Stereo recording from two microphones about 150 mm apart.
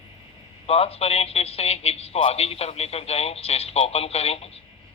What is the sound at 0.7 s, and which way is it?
A man's voice, 40° left (ahead or behind).